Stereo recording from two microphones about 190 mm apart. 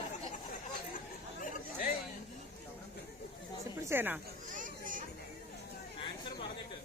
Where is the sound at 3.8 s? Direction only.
10° right (ahead or behind).